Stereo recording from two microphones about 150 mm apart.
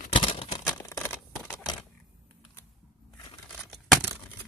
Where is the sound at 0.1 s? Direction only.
40° left (ahead or behind).